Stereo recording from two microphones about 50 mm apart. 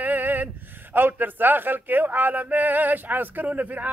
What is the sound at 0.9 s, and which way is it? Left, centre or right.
Speech, right.